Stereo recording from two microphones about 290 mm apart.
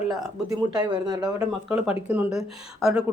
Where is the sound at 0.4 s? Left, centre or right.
Centre.